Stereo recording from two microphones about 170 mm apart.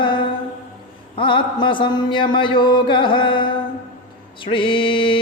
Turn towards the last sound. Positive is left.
turn(degrees=30)  # may be behind; listen again after turning